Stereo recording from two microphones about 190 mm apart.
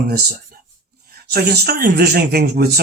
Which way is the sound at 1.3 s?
55° right (ahead or behind).